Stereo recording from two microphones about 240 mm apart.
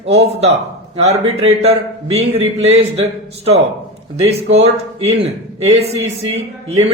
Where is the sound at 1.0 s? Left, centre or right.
Right.